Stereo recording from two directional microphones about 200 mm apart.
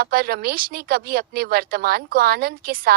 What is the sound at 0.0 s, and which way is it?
Speech, 50° right (ahead or behind).